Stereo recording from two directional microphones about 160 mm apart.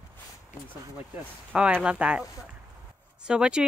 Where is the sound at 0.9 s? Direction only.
10° right (ahead or behind).